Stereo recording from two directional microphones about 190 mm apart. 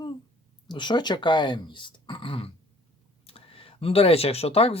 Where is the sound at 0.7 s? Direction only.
25° left (ahead or behind).